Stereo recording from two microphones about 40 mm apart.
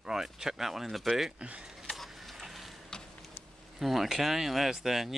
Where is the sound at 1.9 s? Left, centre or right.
Centre.